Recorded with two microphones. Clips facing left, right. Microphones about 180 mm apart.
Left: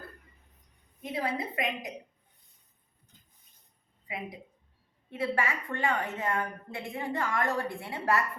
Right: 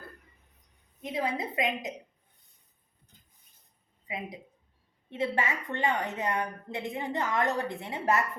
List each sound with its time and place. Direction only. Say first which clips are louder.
1.0 s a woman's voice: right 1 dB; 20° right (ahead or behind)
4.0 s a woman's voice: right 1 dB; 20° right (ahead or behind)